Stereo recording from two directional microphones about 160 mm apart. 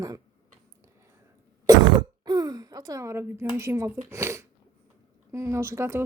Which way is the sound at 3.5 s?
15° right (ahead or behind).